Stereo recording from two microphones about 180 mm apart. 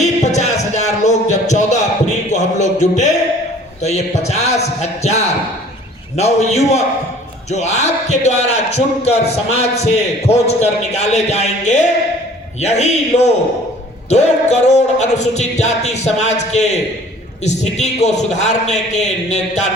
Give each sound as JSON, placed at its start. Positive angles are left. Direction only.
{"t": 0.0, "sound": "music", "side_deg": 40}